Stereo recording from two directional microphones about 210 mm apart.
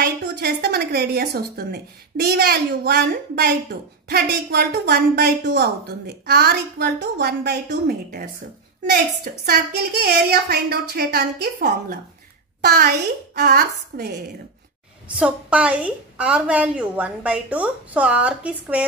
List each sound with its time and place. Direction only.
0.0 s a woman's voice: 50° right (ahead or behind)
15.1 s a woman's voice: 5° right (ahead or behind)